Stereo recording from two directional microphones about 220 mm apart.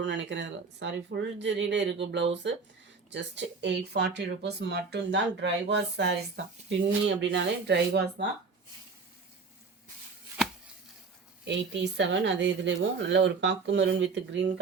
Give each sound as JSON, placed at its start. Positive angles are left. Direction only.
{"t": 0.0, "sound": "speech", "side_deg": -55}
{"t": 11.4, "sound": "speech", "side_deg": -55}